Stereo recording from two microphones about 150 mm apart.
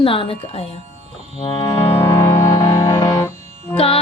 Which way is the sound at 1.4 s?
30° left (ahead or behind).